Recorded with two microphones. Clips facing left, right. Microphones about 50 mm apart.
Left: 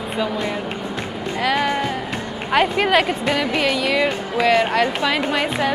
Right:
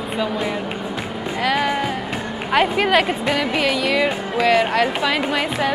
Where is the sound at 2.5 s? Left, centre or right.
Centre.